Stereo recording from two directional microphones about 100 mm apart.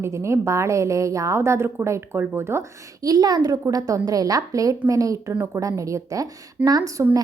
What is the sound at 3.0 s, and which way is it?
A woman's voice, 40° right (ahead or behind).